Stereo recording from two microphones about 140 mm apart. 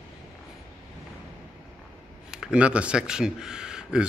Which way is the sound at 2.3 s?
5° right (ahead or behind).